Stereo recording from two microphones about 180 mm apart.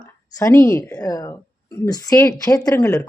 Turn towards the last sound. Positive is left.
turn(degrees=15)  # may be behind; listen again after turning